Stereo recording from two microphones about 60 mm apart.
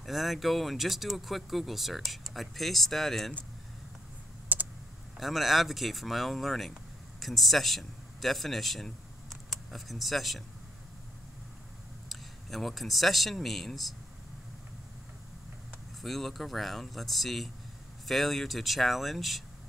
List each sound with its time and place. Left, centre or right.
0.0 s speech: centre
4.5 s computer keyboard: right
5.2 s a man's voice: centre
12.1 s speech: centre
16.0 s speech: centre